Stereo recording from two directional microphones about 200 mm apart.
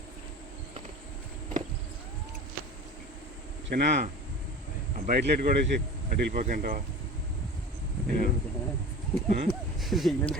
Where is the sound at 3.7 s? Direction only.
55° right (ahead or behind).